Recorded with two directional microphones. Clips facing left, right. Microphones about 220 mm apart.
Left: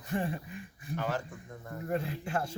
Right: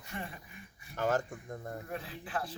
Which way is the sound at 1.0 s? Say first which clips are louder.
Right 4 dB; 45° right (ahead or behind).